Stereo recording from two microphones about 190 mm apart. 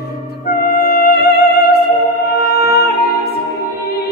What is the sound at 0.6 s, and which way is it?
Music, 55° left (ahead or behind).